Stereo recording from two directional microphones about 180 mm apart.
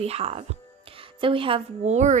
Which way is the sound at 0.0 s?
35° right (ahead or behind).